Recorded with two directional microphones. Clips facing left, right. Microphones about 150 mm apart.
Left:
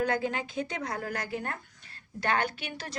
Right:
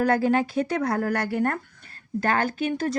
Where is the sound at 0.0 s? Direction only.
60° right (ahead or behind).